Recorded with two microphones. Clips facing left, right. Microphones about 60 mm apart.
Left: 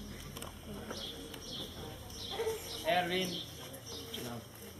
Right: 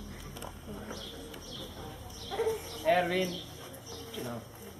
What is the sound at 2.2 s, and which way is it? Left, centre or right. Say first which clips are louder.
Bird: right 5 dB; right.